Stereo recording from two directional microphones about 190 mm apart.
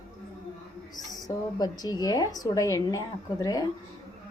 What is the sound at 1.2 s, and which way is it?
A woman's voice, 20° left (ahead or behind).